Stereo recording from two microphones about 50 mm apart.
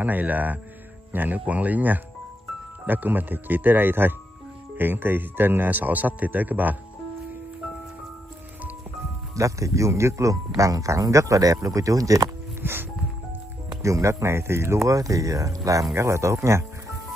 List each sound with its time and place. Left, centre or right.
0.0 s speech: right
9.3 s speech: right
12.6 s music: right
13.8 s speech: right